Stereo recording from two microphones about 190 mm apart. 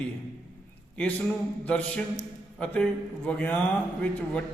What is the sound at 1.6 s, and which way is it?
A man's voice, 5° left (ahead or behind).